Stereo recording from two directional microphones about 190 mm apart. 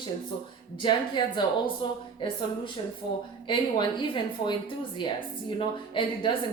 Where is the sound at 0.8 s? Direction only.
25° left (ahead or behind).